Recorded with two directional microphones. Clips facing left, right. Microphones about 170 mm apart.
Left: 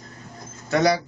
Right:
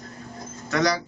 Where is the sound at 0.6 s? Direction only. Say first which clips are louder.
Left 3 dB; 30° left (ahead or behind).